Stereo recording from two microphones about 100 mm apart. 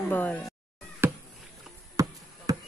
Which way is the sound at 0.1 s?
20° left (ahead or behind).